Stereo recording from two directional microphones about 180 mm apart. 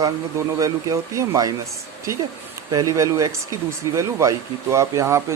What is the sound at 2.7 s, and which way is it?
Speech, 20° right (ahead or behind).